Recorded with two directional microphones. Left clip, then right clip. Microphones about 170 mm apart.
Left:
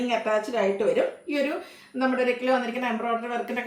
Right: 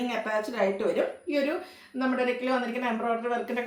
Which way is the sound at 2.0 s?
20° left (ahead or behind).